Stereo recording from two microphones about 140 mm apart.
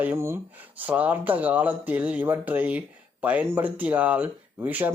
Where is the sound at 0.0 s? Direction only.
15° right (ahead or behind).